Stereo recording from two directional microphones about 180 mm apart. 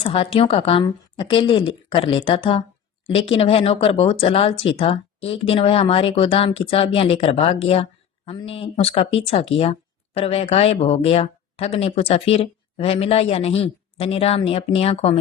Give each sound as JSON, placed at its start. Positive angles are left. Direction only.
{"t": 0.0, "sound": "a woman's voice", "side_deg": 30}